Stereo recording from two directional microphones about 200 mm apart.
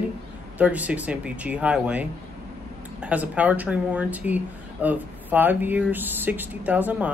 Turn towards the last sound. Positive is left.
turn(degrees=-10)  # may be behind; listen again after turning